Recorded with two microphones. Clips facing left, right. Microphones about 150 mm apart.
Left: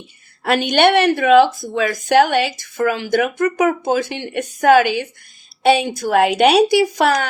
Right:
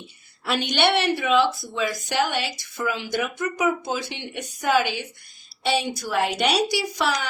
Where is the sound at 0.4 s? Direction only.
50° left (ahead or behind).